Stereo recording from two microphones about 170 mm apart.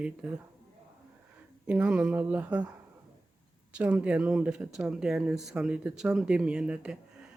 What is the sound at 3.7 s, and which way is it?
Speech, 10° right (ahead or behind).